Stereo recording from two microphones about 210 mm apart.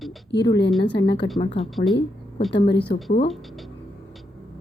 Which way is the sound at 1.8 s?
35° left (ahead or behind).